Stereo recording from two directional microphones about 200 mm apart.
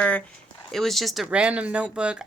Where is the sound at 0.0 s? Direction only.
5° left (ahead or behind).